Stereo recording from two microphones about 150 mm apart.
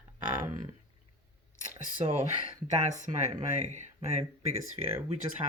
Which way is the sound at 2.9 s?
55° right (ahead or behind).